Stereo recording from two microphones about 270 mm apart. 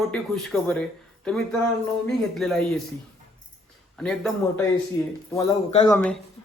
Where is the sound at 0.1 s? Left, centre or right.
Centre.